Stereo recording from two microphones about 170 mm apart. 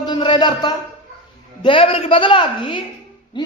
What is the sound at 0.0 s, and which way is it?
A man's voice, 25° left (ahead or behind).